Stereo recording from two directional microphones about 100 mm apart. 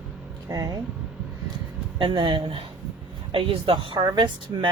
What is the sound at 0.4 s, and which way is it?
Speech, 35° right (ahead or behind).